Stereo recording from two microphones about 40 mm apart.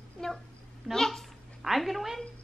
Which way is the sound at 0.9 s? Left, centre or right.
Centre.